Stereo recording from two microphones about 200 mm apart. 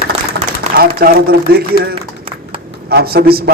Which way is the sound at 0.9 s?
50° right (ahead or behind).